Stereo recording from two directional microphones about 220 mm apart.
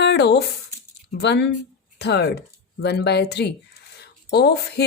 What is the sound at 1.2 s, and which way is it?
Speech, 50° left (ahead or behind).